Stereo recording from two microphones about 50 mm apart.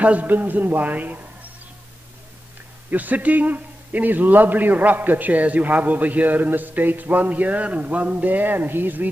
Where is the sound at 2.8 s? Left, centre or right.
Right.